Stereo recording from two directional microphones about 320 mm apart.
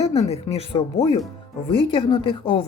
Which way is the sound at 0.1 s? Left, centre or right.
Centre.